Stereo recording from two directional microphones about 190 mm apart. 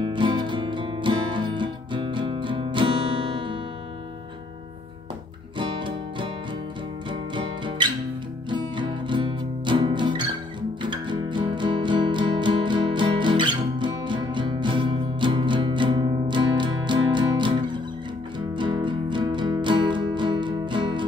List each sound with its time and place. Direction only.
0.0 s music: 25° right (ahead or behind)
5.6 s music: 25° right (ahead or behind)